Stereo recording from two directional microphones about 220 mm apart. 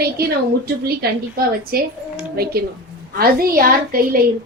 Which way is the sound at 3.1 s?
40° right (ahead or behind).